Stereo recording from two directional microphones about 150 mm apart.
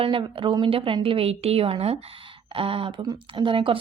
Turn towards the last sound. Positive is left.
turn(degrees=-35)  # may be behind; listen again after turning